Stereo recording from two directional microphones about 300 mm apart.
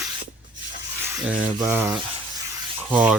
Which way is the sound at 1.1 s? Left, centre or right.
Centre.